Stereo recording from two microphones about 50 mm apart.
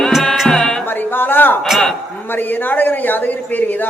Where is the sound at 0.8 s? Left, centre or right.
Left.